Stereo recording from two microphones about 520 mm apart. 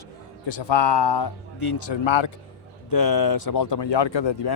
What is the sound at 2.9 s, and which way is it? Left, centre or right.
Speech, left.